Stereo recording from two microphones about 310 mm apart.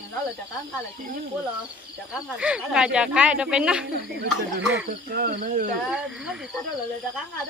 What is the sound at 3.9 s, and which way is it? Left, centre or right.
Speech, right.